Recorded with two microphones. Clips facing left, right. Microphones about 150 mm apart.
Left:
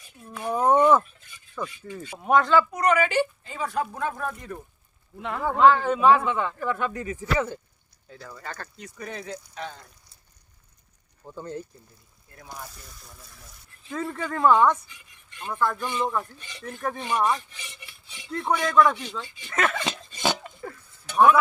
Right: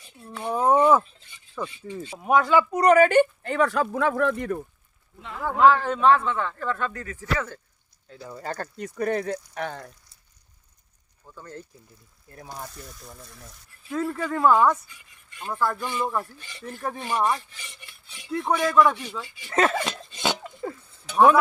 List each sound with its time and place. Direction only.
0.3 s a sound: centre (ahead or behind)
1.6 s speech: 10° right (ahead or behind)
2.1 s cutlery: 5° right (ahead or behind)
2.7 s speech: 40° right (ahead or behind); by 4.5 s 80° right
5.4 s speech: centre (ahead or behind); by 7.6 s 20° left (ahead or behind)
8.3 s speech: 35° right (ahead or behind); by 9.9 s 65° right (ahead or behind)
11.3 s speech: 25° left (ahead or behind)
12.7 s cutlery: centre (ahead or behind)
19.5 s speech: 30° right (ahead or behind)
20.6 s chink: 20° right (ahead or behind)